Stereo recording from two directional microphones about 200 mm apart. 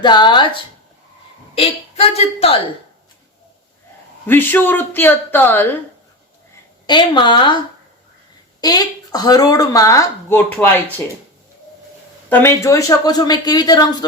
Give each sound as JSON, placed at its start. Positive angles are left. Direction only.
{"t": 0.0, "sound": "speech", "side_deg": 20}
{"t": 1.5, "sound": "speech", "side_deg": 30}
{"t": 4.3, "sound": "speech", "side_deg": 10}
{"t": 6.8, "sound": "speech", "side_deg": 20}
{"t": 8.6, "sound": "speech", "side_deg": 20}
{"t": 12.3, "sound": "speech", "side_deg": 10}